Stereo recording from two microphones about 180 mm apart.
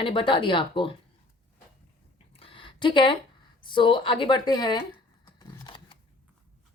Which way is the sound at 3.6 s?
25° left (ahead or behind).